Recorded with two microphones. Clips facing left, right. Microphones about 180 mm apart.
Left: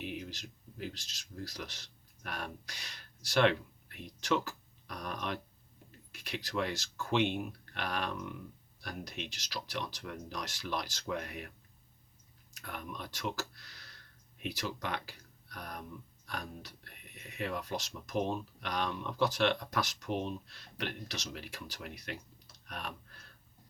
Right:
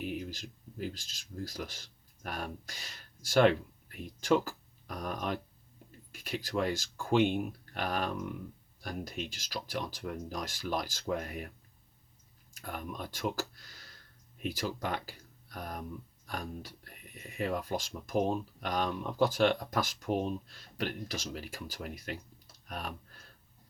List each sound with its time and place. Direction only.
0.0 s speech: 45° right (ahead or behind)
12.6 s speech: 45° right (ahead or behind)
22.6 s typing: 45° right (ahead or behind)